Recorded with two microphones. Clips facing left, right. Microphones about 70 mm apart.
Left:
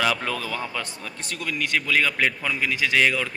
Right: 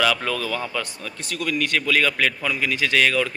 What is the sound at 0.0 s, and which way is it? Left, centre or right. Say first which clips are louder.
A man's voice: right 3 dB; left.